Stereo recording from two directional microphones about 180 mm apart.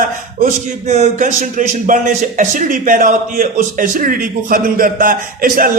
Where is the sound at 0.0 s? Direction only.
40° right (ahead or behind).